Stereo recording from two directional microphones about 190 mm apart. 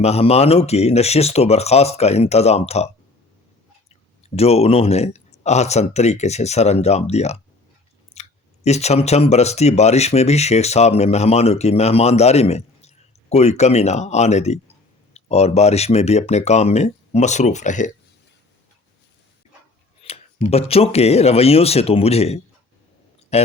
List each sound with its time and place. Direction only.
0.0 s speech: 35° left (ahead or behind)
4.2 s speech: 35° left (ahead or behind)
20.0 s speech: 30° left (ahead or behind)